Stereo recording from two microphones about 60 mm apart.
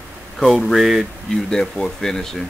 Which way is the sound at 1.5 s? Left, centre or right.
Centre.